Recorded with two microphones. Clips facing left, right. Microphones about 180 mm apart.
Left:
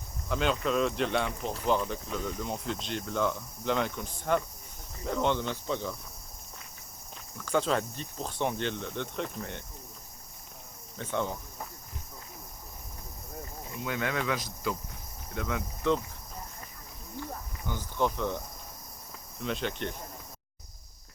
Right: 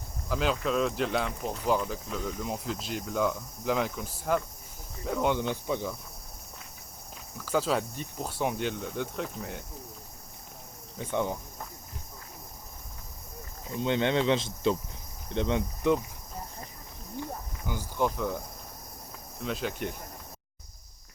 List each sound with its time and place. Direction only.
0.3 s speech: centre (ahead or behind)
5.0 s cricket: 5° right (ahead or behind)
7.3 s speech: 5° right (ahead or behind)
10.9 s cricket: 15° right (ahead or behind)
13.7 s speech: 25° right (ahead or behind)
17.2 s cricket: 15° right (ahead or behind)
19.4 s speech: centre (ahead or behind)